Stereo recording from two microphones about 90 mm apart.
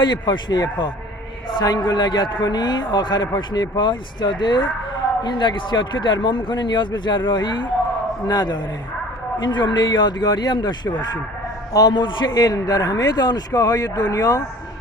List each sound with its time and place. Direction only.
0.0 s a man's voice: 55° left (ahead or behind)
11.7 s a man's voice: 40° left (ahead or behind)
11.9 s a man's voice: 60° left (ahead or behind); by 14.4 s 45° left (ahead or behind)